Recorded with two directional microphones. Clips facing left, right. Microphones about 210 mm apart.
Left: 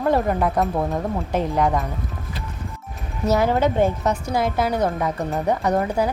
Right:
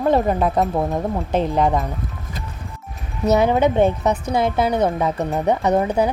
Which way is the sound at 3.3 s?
20° right (ahead or behind).